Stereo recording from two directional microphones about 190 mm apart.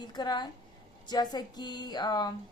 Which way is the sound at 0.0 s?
20° left (ahead or behind).